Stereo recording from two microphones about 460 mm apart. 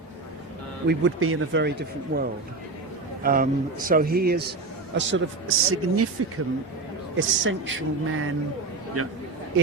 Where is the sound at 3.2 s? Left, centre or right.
Centre.